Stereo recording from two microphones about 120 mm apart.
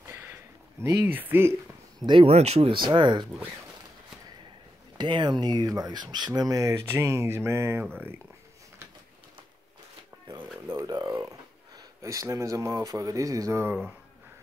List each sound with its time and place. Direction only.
0.0 s a sound: 20° right (ahead or behind)
0.8 s speech: 20° right (ahead or behind)
2.0 s speech: 45° right (ahead or behind)
2.3 s speech: 60° right (ahead or behind); by 3.3 s 40° right (ahead or behind)
4.9 s speech: 40° right (ahead or behind); by 7.8 s 20° right (ahead or behind)
10.7 s speech: 35° right (ahead or behind)